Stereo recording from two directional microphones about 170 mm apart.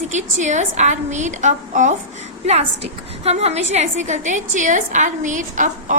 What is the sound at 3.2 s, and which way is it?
A woman's voice, 40° right (ahead or behind).